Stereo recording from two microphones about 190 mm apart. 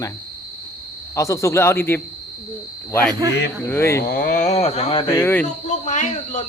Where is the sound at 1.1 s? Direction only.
15° left (ahead or behind).